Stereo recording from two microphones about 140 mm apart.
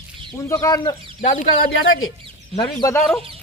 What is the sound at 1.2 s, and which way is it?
Speech, 70° left (ahead or behind).